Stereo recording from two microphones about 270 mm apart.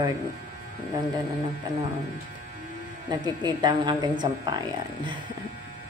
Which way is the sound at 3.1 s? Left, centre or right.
Centre.